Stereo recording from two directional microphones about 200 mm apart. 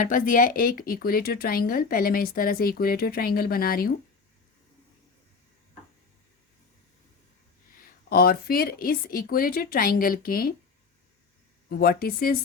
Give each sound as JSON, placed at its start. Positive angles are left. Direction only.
{"t": 0.0, "sound": "speech", "side_deg": 40}
{"t": 7.7, "sound": "speech", "side_deg": 45}
{"t": 11.7, "sound": "speech", "side_deg": 50}